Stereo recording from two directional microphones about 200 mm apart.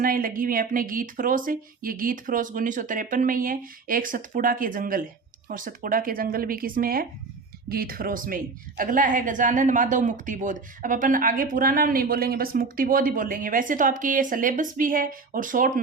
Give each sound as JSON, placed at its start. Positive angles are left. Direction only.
{"t": 0.0, "sound": "a woman's voice", "side_deg": -45}